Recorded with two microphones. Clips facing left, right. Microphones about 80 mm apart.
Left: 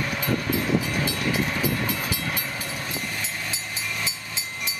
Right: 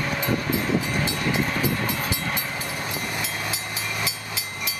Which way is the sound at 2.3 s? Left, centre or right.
Centre.